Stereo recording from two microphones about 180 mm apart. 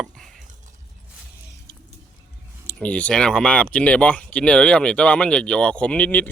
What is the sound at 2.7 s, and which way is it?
Speech, 5° left (ahead or behind).